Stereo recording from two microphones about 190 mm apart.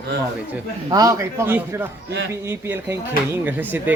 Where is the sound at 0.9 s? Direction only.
20° right (ahead or behind).